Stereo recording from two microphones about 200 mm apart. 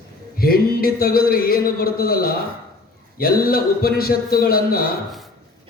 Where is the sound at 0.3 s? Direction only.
50° left (ahead or behind).